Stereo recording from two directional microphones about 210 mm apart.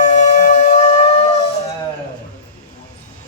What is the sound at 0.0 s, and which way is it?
Music, 35° left (ahead or behind).